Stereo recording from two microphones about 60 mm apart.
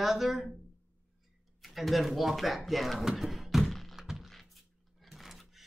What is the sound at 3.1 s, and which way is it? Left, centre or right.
Thunk, centre.